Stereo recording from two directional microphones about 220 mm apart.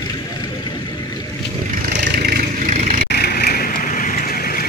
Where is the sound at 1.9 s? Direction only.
50° right (ahead or behind); by 3.1 s 35° right (ahead or behind).